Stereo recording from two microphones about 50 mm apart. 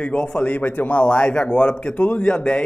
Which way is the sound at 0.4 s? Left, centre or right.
Left.